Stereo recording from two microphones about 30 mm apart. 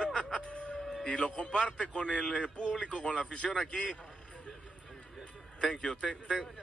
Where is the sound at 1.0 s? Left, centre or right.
Left.